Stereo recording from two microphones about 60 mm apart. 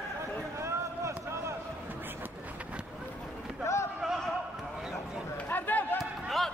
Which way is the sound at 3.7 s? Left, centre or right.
Left.